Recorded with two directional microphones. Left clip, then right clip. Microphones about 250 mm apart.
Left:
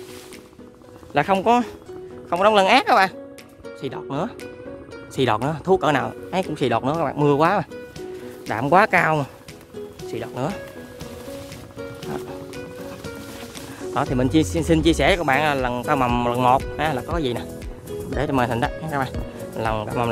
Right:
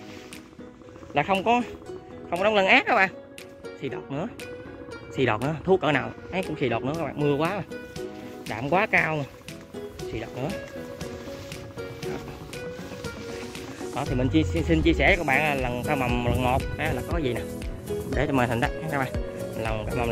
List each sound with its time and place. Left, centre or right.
1.1 s speech: centre
14.1 s speech: left